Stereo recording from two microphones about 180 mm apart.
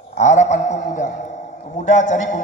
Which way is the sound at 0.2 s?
40° left (ahead or behind).